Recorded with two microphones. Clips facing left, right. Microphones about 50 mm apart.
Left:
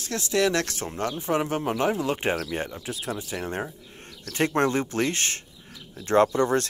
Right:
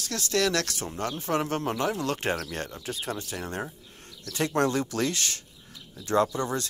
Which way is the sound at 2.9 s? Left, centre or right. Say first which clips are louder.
Right 2 dB; centre.